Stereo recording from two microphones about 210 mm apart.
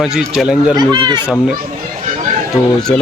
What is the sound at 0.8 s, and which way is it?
Speech, 20° right (ahead or behind).